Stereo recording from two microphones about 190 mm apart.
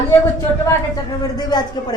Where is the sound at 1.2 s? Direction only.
20° left (ahead or behind).